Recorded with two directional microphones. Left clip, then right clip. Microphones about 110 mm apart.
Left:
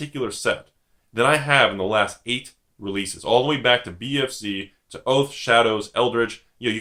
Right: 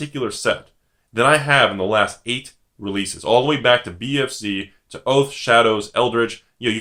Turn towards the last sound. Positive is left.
turn(degrees=-35)  # may be behind; listen again after turning